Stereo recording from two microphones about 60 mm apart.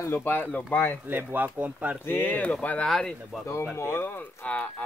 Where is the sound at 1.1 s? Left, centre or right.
Right.